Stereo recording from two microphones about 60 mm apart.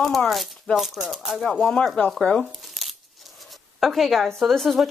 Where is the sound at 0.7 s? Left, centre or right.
Centre.